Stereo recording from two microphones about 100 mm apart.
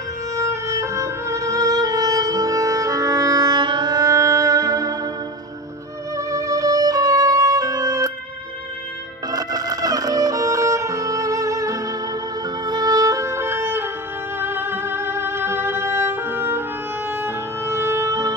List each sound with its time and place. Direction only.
0.4 s music: 30° right (ahead or behind)
6.1 s music: 35° right (ahead or behind)
9.3 s music: 40° right (ahead or behind)